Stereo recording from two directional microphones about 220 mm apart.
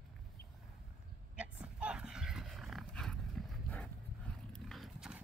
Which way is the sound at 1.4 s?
5° right (ahead or behind).